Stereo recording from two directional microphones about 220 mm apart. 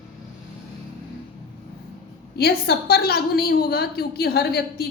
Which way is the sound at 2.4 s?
45° left (ahead or behind).